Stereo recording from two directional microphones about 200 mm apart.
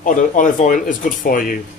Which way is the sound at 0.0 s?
40° left (ahead or behind).